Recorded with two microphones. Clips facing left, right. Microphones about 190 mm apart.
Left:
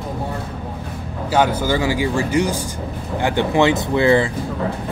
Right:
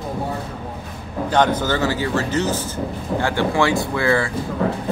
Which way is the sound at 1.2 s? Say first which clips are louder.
Left 1 dB; 10° left (ahead or behind).